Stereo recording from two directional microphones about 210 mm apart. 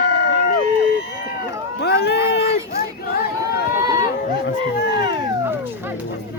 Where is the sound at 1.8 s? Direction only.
50° left (ahead or behind).